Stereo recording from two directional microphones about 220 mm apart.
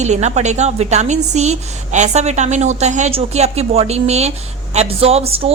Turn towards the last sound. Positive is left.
turn(degrees=-30)  # may be behind; listen again after turning